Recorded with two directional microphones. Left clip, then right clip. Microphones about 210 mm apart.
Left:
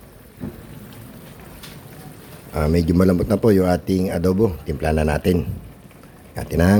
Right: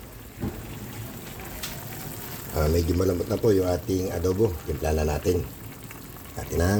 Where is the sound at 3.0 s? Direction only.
50° left (ahead or behind).